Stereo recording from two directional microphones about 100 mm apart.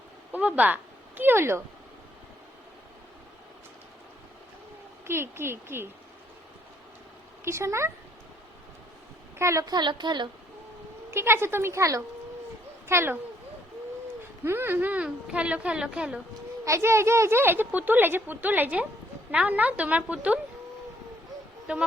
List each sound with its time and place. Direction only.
0.3 s speech: 15° right (ahead or behind)
5.0 s speech: 25° right (ahead or behind)
7.4 s speech: 30° right (ahead or behind)
9.4 s speech: 30° right (ahead or behind)
9.6 s a woman's voice: 50° right (ahead or behind)
11.1 s speech: 25° right (ahead or behind)
14.4 s a woman's voice: 20° right (ahead or behind)
16.6 s a woman's voice: 25° right (ahead or behind)
21.7 s a woman's voice: 15° right (ahead or behind)